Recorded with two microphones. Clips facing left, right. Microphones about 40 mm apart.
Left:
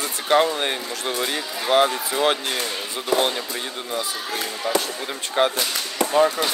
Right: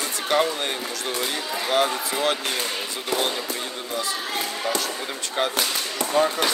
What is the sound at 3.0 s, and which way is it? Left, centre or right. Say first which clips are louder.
Speech: left 5 dB; left.